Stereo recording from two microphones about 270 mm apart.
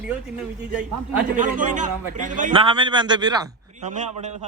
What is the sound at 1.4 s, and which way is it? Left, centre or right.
A man's voice, right.